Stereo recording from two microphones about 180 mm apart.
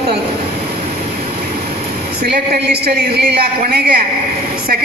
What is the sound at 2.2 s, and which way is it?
A woman's voice, 60° right (ahead or behind).